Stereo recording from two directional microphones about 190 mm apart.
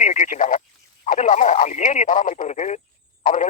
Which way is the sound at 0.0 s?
40° left (ahead or behind).